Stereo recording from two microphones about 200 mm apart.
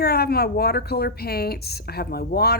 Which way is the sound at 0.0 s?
50° left (ahead or behind).